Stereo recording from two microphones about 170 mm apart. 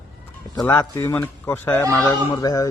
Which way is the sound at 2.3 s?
25° left (ahead or behind).